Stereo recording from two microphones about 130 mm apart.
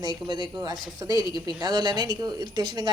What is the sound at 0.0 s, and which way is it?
Speech, 35° right (ahead or behind).